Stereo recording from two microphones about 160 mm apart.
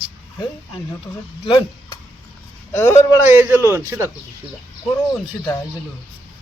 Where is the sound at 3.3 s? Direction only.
15° right (ahead or behind).